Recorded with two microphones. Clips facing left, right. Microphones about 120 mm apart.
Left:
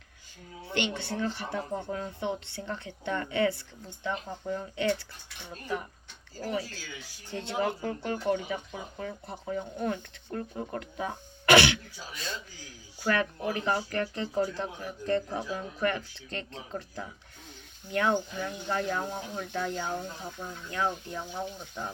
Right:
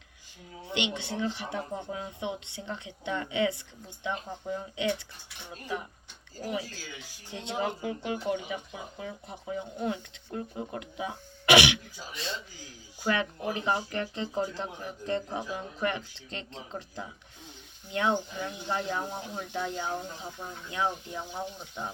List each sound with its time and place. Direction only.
0.6 s speech: 20° right (ahead or behind)
6.4 s speech: 15° right (ahead or behind)
12.1 s speech: 25° right (ahead or behind)